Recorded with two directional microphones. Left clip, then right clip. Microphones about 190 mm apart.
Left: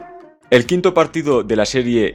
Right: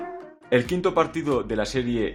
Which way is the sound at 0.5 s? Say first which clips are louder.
Left 8 dB; 35° left (ahead or behind).